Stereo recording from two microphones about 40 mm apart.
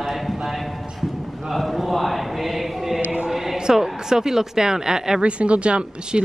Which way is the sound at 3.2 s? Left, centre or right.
Centre.